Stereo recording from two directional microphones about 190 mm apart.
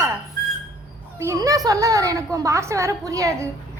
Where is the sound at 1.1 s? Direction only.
15° right (ahead or behind).